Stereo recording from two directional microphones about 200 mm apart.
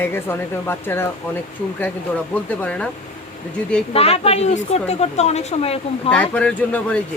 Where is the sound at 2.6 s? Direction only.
5° left (ahead or behind).